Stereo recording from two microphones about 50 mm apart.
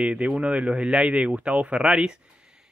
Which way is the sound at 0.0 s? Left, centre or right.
Right.